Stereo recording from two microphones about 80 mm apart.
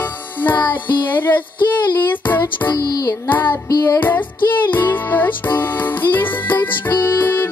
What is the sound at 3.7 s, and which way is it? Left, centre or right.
Music, left.